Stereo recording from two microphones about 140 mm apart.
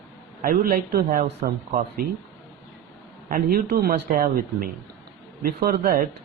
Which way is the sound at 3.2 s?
90° right.